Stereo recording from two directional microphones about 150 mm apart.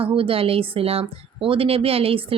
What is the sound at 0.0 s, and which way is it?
A woman's voice, 35° right (ahead or behind).